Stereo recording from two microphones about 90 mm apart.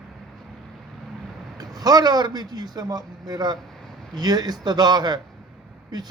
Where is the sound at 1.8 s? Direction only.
45° right (ahead or behind).